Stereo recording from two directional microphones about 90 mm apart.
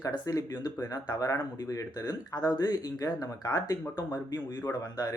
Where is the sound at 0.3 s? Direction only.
45° left (ahead or behind).